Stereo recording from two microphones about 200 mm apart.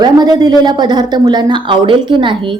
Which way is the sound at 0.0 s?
20° right (ahead or behind).